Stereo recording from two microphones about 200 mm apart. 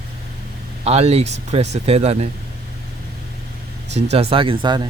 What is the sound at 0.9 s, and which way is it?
Speech, 30° right (ahead or behind).